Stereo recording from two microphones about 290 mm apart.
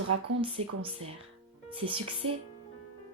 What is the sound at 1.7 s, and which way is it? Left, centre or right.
Speech, centre.